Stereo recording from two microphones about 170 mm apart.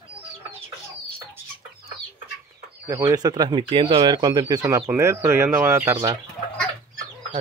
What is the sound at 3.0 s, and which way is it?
Speech, 25° right (ahead or behind).